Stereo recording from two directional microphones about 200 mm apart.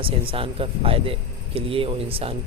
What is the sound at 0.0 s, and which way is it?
Speech, 25° right (ahead or behind).